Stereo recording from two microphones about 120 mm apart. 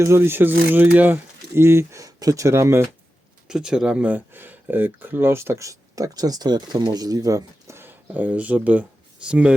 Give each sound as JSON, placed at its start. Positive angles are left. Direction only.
{"t": 0.0, "sound": "speech", "side_deg": -20}
{"t": 3.5, "sound": "speech", "side_deg": -5}